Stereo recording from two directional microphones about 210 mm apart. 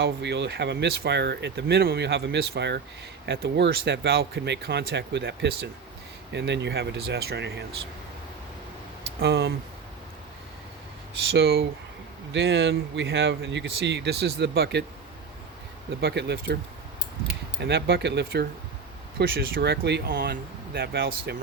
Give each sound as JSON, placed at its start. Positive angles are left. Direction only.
{"t": 0.0, "sound": "speech", "side_deg": -55}
{"t": 9.2, "sound": "speech", "side_deg": -50}
{"t": 11.3, "sound": "speech", "side_deg": -50}
{"t": 12.3, "sound": "speech", "side_deg": -60}
{"t": 16.0, "sound": "speech", "side_deg": -50}
{"t": 17.6, "sound": "speech", "side_deg": -50}